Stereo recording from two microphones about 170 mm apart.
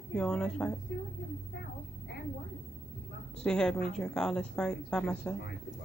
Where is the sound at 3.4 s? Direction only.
5° left (ahead or behind).